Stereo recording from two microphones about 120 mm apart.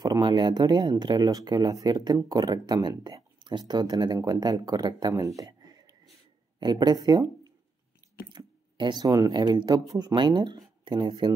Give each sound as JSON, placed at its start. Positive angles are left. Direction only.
{"t": 0.0, "sound": "speech", "side_deg": -35}
{"t": 8.3, "sound": "a sound", "side_deg": -40}
{"t": 9.0, "sound": "speech", "side_deg": -30}